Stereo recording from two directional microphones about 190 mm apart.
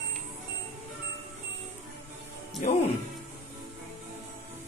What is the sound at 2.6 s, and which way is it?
Speech, 40° left (ahead or behind).